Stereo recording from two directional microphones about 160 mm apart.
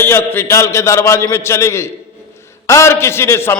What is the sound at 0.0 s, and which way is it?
A man's voice, 15° left (ahead or behind).